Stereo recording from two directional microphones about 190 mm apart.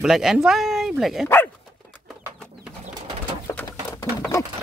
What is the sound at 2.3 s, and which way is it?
Pigeon, 5° left (ahead or behind).